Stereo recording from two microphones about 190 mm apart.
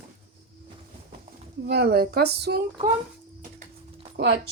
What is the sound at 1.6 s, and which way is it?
Speech, 55° right (ahead or behind).